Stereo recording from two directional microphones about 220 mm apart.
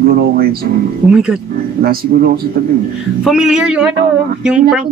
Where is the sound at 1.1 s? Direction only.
5° right (ahead or behind).